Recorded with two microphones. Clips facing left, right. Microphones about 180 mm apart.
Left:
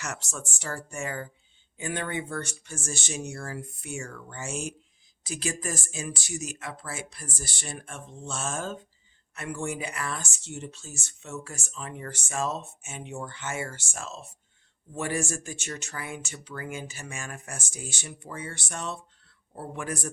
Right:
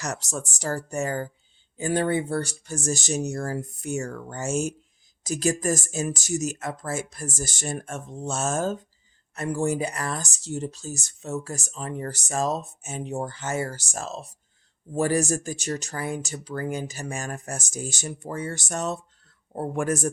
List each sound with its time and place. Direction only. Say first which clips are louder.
0.0 s speech: right 6 dB; 40° right (ahead or behind)